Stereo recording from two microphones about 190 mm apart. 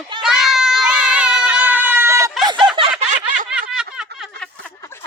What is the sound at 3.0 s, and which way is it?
Snicker, 40° right (ahead or behind).